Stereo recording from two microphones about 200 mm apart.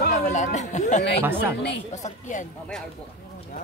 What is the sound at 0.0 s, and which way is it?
Chatter, 35° left (ahead or behind).